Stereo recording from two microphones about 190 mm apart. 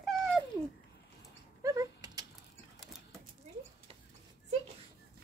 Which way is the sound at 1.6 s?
20° right (ahead or behind).